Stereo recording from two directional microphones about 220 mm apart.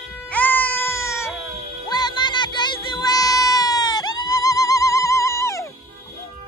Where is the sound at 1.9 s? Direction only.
20° left (ahead or behind).